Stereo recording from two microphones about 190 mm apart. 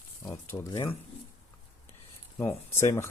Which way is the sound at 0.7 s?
15° left (ahead or behind).